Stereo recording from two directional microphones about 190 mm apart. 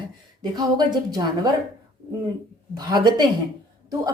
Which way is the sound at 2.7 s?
20° right (ahead or behind).